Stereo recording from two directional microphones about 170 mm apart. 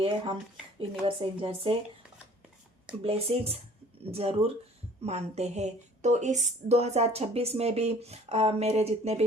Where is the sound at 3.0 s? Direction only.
35° right (ahead or behind).